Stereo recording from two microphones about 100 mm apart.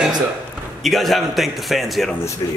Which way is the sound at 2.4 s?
35° left (ahead or behind).